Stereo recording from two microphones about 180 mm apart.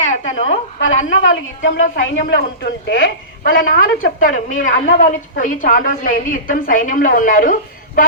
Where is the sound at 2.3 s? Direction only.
70° left (ahead or behind).